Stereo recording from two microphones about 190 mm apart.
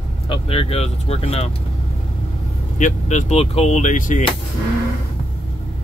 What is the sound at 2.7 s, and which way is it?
Speech, 40° left (ahead or behind).